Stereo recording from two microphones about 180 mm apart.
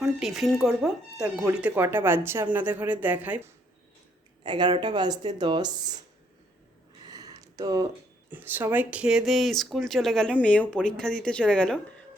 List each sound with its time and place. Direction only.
0.0 s speech: centre (ahead or behind)
4.4 s speech: 25° right (ahead or behind)
7.1 s a sound: 20° right (ahead or behind)
8.3 s speech: 10° right (ahead or behind); by 11.8 s 5° left (ahead or behind)